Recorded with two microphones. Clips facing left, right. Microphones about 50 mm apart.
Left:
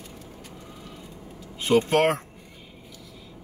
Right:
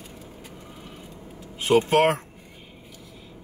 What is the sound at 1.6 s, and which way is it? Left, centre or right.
Speech, centre.